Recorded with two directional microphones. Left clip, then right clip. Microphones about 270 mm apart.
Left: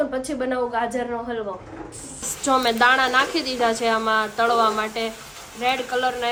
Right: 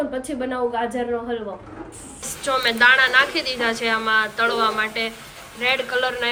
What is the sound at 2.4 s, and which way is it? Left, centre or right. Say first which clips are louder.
A woman's voice: right 1 dB; centre.